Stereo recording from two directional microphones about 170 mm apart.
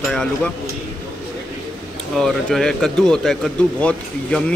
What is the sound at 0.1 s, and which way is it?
Speech, 5° left (ahead or behind).